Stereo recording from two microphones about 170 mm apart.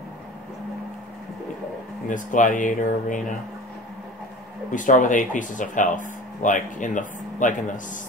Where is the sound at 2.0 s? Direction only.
50° left (ahead or behind).